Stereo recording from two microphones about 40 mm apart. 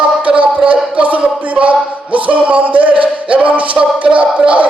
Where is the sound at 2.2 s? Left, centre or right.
Right.